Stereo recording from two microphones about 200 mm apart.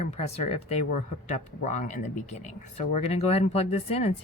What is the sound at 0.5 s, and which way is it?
Speech, 30° left (ahead or behind).